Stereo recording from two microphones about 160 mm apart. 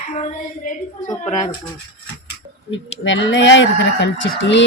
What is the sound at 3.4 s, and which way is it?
Speech, 90° left.